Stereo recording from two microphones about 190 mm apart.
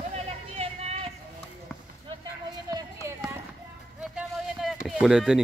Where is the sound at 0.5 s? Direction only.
35° right (ahead or behind).